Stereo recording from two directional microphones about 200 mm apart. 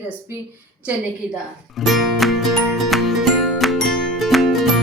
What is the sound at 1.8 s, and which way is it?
Music, centre (ahead or behind).